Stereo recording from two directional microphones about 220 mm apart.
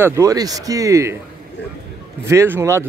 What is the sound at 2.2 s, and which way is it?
Speech, 10° right (ahead or behind).